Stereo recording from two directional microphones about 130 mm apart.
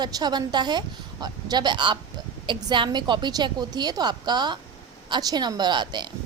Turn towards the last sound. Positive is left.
turn(degrees=-35)  # may be behind; listen again after turning